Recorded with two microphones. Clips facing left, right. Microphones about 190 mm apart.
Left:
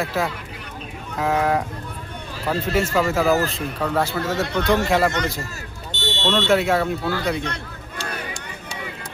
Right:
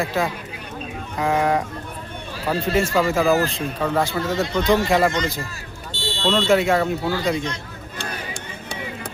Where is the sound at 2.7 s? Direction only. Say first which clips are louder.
Right 1 dB; 5° left (ahead or behind).